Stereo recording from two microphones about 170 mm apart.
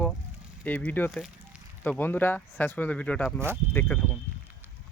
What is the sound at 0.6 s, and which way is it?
Speech, 10° left (ahead or behind).